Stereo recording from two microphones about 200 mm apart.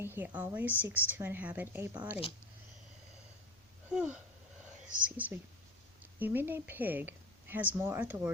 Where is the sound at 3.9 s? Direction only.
5° right (ahead or behind).